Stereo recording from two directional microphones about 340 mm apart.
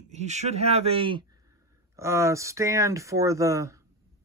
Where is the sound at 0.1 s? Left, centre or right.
Centre.